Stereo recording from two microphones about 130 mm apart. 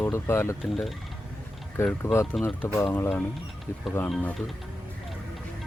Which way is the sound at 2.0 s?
15° left (ahead or behind).